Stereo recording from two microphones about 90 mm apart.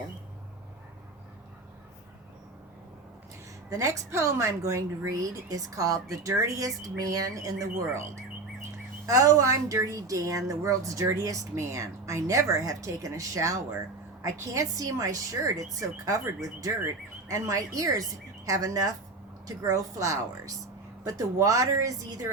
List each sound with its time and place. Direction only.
3.7 s speech: 35° right (ahead or behind)